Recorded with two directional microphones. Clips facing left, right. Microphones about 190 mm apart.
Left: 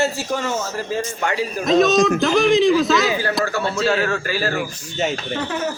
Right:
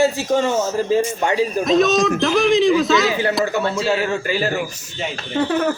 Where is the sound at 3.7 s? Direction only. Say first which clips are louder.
Even; 20° right (ahead or behind).